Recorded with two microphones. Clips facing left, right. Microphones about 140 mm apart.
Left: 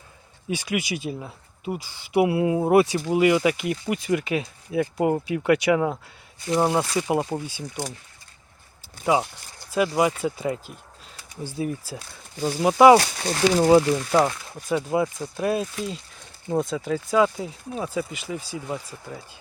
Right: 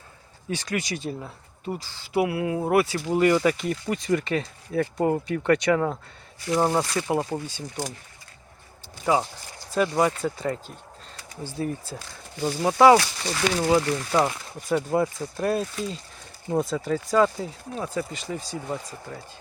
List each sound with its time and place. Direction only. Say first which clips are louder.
0.4 s speech: left 2 dB; 10° left (ahead or behind)
9.7 s speech: left 1 dB; 10° left (ahead or behind)
13.0 s speech: left 3 dB; 50° left (ahead or behind)
13.6 s speech: left 6 dB; 25° left (ahead or behind)
13.9 s speech: left 3 dB; 10° left (ahead or behind)